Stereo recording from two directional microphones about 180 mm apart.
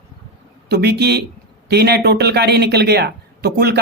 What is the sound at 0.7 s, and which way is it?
Speech, 65° right (ahead or behind).